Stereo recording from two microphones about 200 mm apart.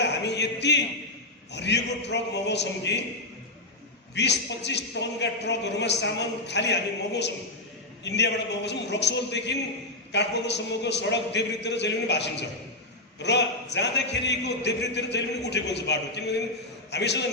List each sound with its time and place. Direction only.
0.0 s a sound: 60° left (ahead or behind)
1.5 s a man's voice: 60° left (ahead or behind)
4.1 s a man's voice: 60° left (ahead or behind)